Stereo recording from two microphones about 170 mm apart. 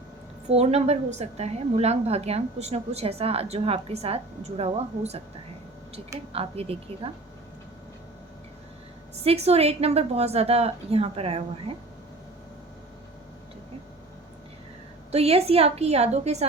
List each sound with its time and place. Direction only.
0.4 s a woman's voice: 40° right (ahead or behind)
6.3 s a woman's voice: 35° right (ahead or behind)
9.2 s a woman's voice: 35° right (ahead or behind)
15.1 s a woman's voice: 35° right (ahead or behind)